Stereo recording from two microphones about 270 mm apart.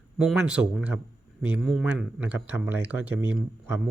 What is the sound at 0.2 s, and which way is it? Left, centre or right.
Speech, centre.